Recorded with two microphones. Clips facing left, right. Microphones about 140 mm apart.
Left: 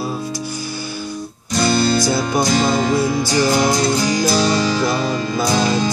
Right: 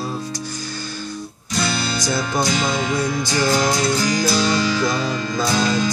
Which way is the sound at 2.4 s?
35° left (ahead or behind).